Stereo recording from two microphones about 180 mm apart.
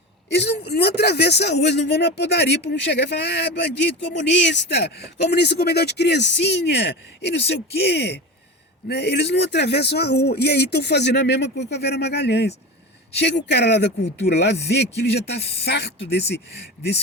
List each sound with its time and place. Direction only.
0.3 s speech: 70° left (ahead or behind)